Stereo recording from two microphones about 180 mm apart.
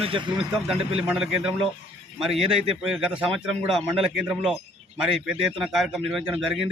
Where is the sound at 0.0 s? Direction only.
30° right (ahead or behind).